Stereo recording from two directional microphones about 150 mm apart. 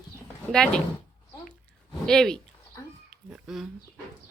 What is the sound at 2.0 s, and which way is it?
Speech, 5° left (ahead or behind).